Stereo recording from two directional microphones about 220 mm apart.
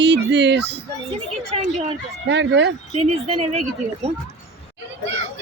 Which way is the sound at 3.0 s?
30° right (ahead or behind).